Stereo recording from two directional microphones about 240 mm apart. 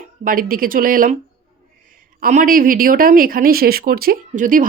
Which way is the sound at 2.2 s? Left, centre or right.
Right.